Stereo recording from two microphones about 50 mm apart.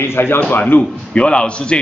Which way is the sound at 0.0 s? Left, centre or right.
Left.